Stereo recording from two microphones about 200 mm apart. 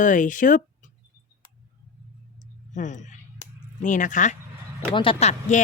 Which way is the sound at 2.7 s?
35° left (ahead or behind).